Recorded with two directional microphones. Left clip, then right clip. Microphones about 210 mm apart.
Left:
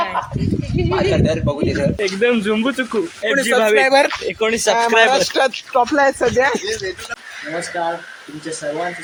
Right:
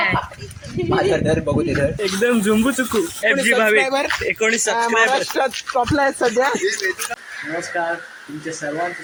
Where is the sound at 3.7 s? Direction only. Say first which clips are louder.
Left 5 dB; 55° left (ahead or behind).